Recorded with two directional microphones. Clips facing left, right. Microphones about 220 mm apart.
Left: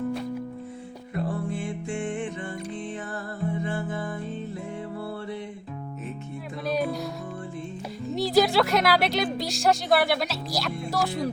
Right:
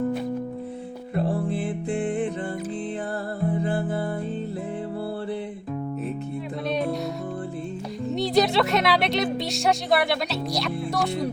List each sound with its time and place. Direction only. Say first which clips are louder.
1.1 s music: right 4 dB; 30° right (ahead or behind)
3.5 s music: right 4 dB; 35° right (ahead or behind)
6.7 s music: even; centre (ahead or behind)
8.1 s speech: even; centre (ahead or behind)